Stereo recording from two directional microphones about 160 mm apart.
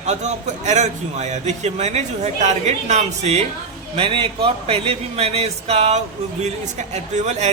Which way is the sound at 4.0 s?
35° right (ahead or behind).